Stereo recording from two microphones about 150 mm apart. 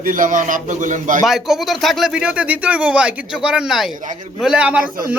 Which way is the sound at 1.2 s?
Centre (ahead or behind).